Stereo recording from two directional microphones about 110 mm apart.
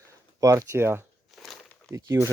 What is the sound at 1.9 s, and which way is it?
Speech, 25° right (ahead or behind).